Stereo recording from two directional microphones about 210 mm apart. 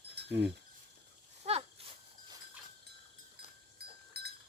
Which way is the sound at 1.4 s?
30° right (ahead or behind).